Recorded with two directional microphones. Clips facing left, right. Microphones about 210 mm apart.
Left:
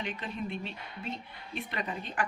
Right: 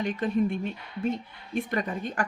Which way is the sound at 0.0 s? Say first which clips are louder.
Right 11 dB; 45° right (ahead or behind).